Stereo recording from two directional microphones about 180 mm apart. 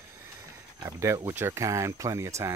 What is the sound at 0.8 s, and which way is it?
Speech, 15° right (ahead or behind).